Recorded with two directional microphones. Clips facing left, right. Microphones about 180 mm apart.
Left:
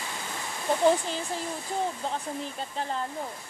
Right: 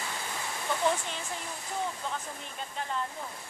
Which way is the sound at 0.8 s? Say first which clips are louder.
Left 7 dB; 35° left (ahead or behind).